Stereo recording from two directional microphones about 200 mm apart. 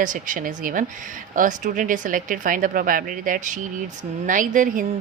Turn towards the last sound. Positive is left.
turn(degrees=-40)  # may be behind; listen again after turning